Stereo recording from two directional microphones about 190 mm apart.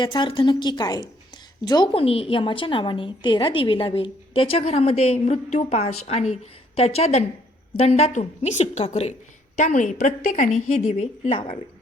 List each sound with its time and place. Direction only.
0.0 s a woman's voice: 25° left (ahead or behind)